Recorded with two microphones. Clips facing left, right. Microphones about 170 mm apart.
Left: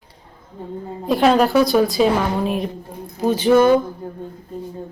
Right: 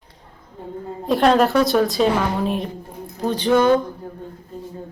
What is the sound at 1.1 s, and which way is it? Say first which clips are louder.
Speech: left 1 dB; centre (ahead or behind).